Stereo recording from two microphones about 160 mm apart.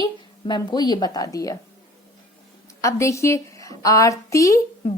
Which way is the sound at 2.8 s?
20° left (ahead or behind).